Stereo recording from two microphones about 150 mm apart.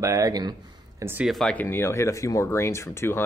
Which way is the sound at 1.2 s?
5° left (ahead or behind).